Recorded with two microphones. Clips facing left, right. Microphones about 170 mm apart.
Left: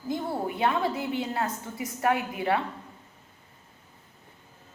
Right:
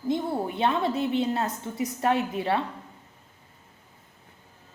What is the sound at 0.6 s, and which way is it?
A woman's voice, 25° right (ahead or behind).